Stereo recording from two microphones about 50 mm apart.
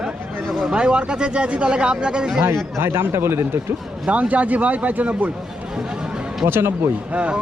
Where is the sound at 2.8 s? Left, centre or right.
Right.